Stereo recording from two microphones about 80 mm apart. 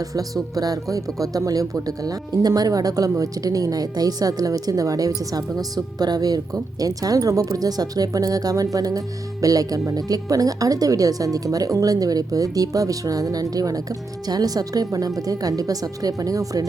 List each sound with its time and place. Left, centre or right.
0.0 s speech: right